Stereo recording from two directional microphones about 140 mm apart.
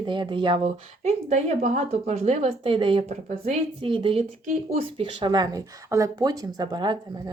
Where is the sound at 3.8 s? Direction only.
40° right (ahead or behind).